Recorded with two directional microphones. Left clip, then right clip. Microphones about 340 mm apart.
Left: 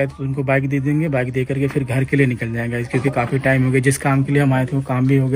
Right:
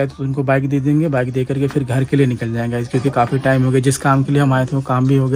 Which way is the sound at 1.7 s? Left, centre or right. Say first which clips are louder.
Right 1 dB; centre.